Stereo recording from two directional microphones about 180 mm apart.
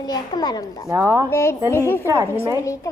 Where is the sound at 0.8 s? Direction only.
15° right (ahead or behind).